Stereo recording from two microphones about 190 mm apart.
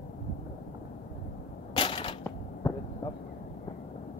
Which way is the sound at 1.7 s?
30° left (ahead or behind).